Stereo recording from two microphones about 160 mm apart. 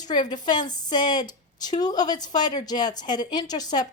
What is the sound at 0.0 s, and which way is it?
A woman's voice, 25° left (ahead or behind).